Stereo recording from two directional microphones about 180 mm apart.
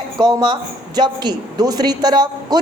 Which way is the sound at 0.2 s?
25° right (ahead or behind).